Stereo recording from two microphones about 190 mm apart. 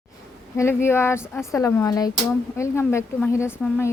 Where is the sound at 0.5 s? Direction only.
15° left (ahead or behind).